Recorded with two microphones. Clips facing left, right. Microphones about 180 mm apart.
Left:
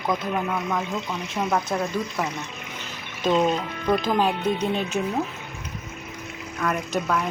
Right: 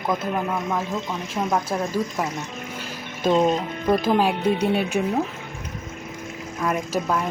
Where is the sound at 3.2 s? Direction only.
5° right (ahead or behind).